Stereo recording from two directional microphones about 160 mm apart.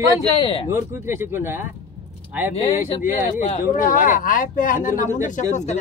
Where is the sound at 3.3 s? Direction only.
55° left (ahead or behind).